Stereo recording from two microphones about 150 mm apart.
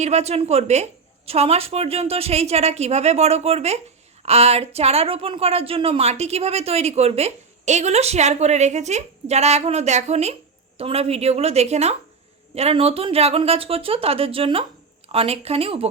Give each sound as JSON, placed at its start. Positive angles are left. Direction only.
{"t": 0.0, "sound": "a woman's voice", "side_deg": -45}